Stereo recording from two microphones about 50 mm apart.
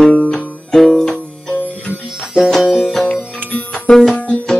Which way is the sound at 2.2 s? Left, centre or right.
Centre.